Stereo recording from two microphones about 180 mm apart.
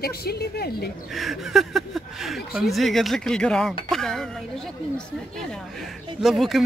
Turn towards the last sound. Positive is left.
turn(degrees=0)  # may be behind; listen again after turning